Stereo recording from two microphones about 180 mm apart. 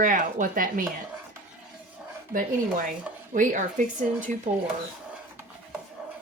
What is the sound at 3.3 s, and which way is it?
Speech, 45° right (ahead or behind).